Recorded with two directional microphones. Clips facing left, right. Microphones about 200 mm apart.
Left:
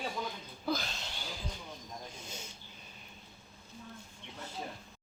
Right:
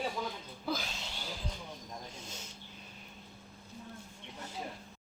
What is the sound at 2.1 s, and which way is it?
Speech, centre (ahead or behind).